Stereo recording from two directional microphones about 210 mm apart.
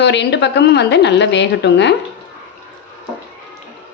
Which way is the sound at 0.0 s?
55° left (ahead or behind).